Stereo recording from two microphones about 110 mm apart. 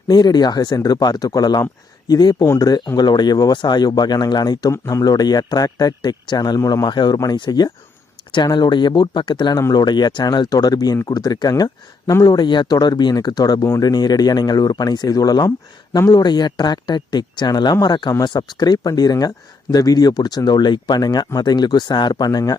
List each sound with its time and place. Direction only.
0.1 s speech: 40° left (ahead or behind)